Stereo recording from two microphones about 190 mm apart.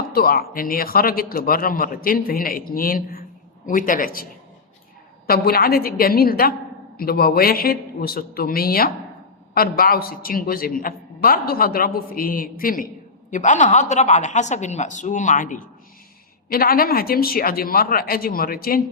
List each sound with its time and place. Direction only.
0.1 s a man's voice: 55° left (ahead or behind)